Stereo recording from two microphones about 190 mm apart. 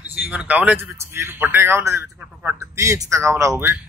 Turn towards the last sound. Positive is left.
turn(degrees=-15)  # may be behind; listen again after turning